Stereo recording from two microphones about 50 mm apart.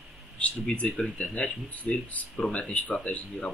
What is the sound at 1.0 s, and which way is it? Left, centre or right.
Speech, left.